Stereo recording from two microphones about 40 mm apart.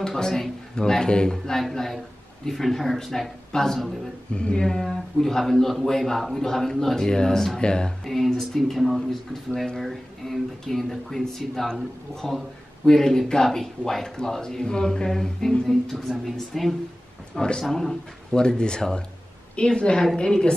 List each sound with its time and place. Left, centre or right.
0.0 s speech: centre
4.3 s speech: left
4.6 s speech: centre
8.0 s speech: centre
17.4 s speech: centre
18.3 s speech: left